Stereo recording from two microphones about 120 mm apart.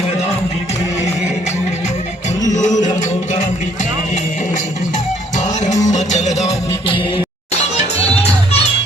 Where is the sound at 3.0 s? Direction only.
90° left.